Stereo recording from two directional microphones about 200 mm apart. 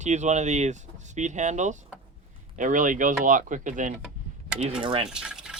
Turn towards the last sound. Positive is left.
turn(degrees=-5)  # may be behind; listen again after turning